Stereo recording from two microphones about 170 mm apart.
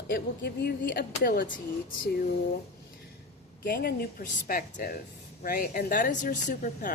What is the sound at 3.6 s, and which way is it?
A woman's voice, 60° left (ahead or behind).